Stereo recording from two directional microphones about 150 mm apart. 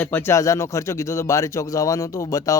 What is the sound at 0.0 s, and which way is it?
Speech, 15° left (ahead or behind).